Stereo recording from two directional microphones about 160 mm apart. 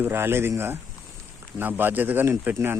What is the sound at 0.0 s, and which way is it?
Speech, 15° right (ahead or behind).